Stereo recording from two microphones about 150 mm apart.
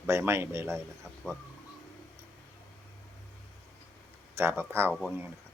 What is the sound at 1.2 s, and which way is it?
Speech, 5° left (ahead or behind).